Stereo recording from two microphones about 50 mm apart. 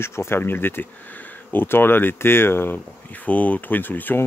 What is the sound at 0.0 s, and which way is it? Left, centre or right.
Speech, left.